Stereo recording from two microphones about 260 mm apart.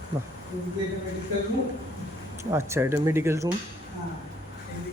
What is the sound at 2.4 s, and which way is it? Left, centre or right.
Speech, centre.